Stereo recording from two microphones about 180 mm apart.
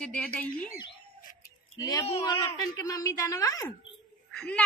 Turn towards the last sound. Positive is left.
turn(degrees=5)  # may be behind; listen again after turning